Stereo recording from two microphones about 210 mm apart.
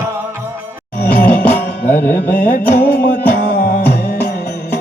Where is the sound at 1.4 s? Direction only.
10° left (ahead or behind).